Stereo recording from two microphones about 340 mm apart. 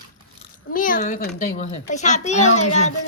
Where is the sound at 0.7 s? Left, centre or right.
Left.